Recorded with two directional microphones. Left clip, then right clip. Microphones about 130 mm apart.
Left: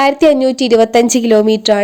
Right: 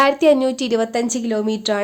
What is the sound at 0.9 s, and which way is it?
Speech, 55° left (ahead or behind).